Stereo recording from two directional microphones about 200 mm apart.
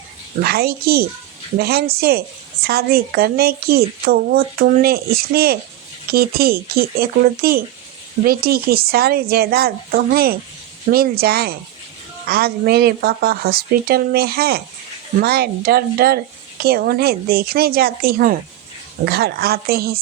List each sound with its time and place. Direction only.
0.4 s speech: 50° right (ahead or behind)